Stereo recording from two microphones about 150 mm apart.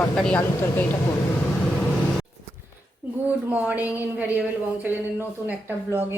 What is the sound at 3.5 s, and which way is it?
Speech, 10° right (ahead or behind).